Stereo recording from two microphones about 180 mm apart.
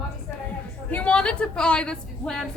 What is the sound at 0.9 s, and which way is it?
A woman's voice, 5° left (ahead or behind).